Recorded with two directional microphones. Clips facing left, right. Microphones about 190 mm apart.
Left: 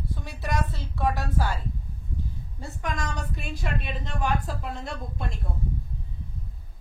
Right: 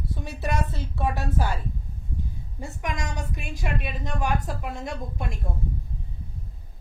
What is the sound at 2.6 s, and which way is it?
A woman's voice, 15° right (ahead or behind).